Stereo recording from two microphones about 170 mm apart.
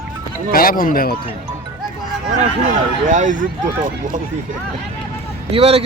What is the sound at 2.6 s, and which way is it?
Speech, 50° right (ahead or behind).